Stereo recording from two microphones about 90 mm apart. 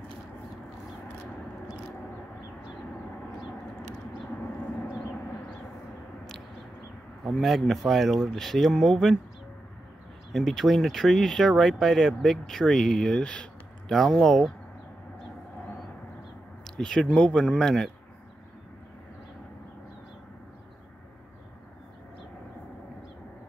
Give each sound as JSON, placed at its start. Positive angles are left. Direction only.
{"t": 7.2, "sound": "speech", "side_deg": 0}
{"t": 10.3, "sound": "speech", "side_deg": 5}
{"t": 16.7, "sound": "speech", "side_deg": 10}